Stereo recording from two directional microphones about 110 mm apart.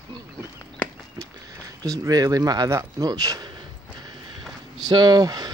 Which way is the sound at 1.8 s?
35° right (ahead or behind).